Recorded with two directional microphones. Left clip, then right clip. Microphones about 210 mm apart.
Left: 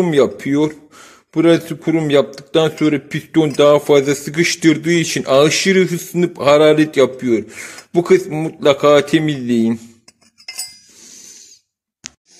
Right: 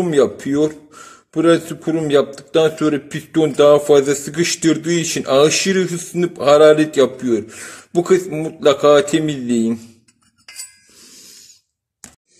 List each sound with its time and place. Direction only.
0.0 s speech: 20° left (ahead or behind)